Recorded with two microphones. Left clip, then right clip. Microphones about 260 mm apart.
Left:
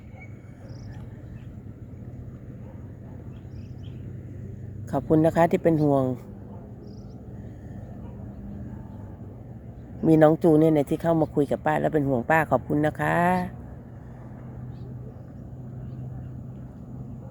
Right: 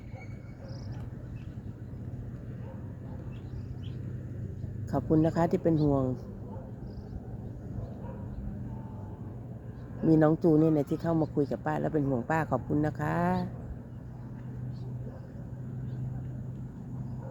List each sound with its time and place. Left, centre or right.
4.9 s speech: centre
10.1 s speech: centre